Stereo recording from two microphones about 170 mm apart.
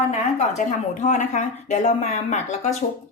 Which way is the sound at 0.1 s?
45° left (ahead or behind).